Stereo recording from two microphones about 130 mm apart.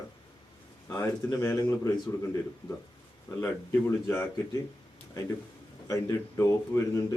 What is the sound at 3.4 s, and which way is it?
Speech, 20° left (ahead or behind).